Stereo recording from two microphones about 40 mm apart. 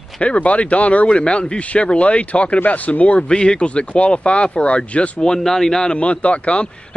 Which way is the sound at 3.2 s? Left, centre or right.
Left.